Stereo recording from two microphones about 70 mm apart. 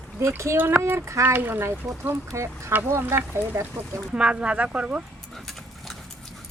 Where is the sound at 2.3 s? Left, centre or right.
Right.